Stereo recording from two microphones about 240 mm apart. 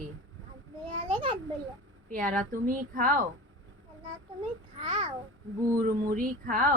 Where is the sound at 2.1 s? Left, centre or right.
Right.